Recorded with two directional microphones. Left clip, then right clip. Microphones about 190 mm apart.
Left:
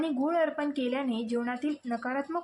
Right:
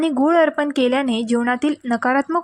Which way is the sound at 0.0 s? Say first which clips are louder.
Right 12 dB; 40° right (ahead or behind).